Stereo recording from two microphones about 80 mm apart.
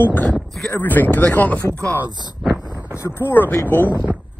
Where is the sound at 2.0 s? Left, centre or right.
Right.